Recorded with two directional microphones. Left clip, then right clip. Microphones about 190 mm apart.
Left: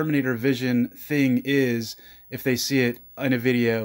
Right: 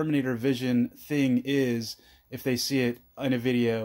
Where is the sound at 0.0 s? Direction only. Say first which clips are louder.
Left 4 dB; 15° left (ahead or behind).